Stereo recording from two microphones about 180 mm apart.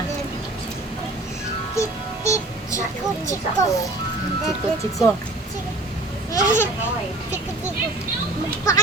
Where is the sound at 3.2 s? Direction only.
15° left (ahead or behind).